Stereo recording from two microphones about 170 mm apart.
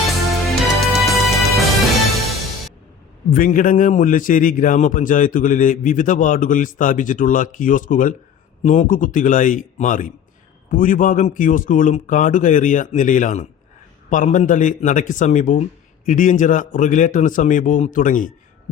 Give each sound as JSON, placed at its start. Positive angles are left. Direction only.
{"t": 0.4, "sound": "music", "side_deg": 0}
{"t": 3.2, "sound": "a man's voice", "side_deg": 50}